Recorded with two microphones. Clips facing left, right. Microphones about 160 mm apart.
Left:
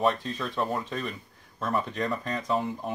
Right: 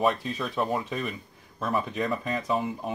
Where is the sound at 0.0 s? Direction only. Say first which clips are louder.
Right 1 dB; 5° right (ahead or behind).